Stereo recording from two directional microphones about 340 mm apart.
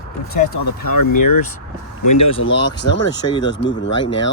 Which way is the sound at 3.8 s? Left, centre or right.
Left.